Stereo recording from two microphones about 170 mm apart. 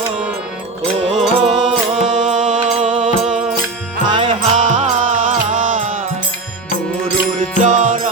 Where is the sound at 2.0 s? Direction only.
45° right (ahead or behind).